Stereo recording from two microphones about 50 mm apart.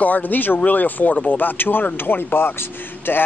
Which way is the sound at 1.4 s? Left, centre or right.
Left.